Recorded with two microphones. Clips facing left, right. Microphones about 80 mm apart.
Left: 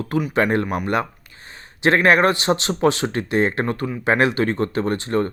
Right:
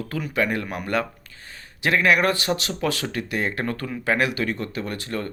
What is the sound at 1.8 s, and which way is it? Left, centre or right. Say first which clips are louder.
Speech: left 4 dB; left.